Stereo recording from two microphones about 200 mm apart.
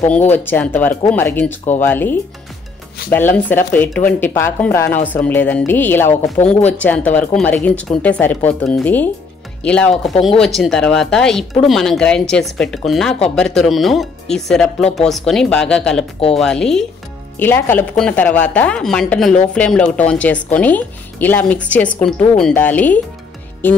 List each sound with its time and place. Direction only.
0.0 s speech: 10° left (ahead or behind)